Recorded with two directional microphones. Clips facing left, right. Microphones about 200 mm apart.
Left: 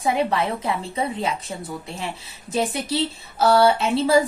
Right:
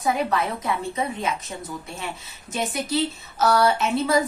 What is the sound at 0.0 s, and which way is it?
A woman's voice, 30° left (ahead or behind).